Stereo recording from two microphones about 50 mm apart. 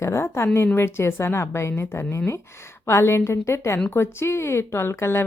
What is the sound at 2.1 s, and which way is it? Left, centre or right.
Speech, left.